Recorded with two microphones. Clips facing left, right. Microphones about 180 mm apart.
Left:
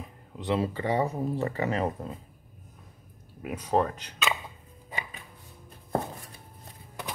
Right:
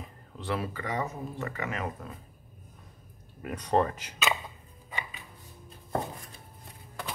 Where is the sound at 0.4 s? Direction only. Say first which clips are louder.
Left 5 dB; 25° left (ahead or behind).